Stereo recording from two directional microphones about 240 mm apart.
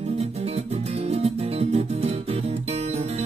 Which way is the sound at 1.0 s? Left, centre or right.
Right.